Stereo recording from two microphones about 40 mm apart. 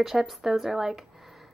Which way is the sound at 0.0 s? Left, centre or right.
Centre.